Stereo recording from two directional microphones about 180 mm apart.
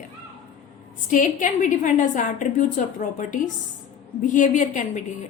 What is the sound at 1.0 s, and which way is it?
A woman's voice, 45° left (ahead or behind).